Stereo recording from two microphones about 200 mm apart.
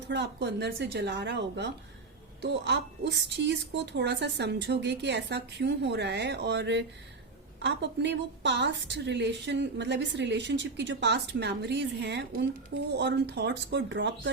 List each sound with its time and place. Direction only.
0.1 s a woman's voice: 60° right (ahead or behind)